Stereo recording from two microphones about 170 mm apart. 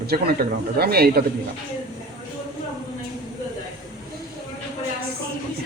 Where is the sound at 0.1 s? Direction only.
65° right (ahead or behind).